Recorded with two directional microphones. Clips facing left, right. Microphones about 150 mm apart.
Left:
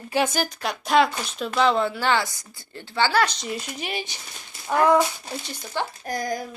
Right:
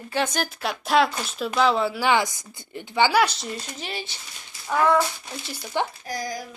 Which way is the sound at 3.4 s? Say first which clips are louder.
Left 2 dB; 10° left (ahead or behind).